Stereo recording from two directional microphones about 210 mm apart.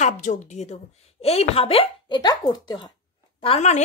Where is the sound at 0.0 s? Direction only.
35° left (ahead or behind).